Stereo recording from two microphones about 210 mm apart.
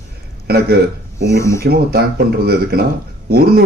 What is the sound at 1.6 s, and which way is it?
Speech, 45° right (ahead or behind).